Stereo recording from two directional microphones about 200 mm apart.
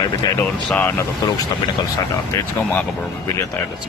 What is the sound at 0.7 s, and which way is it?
Speech, 10° left (ahead or behind).